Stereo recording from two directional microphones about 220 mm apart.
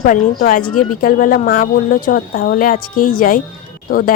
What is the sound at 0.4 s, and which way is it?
Speech, 40° left (ahead or behind).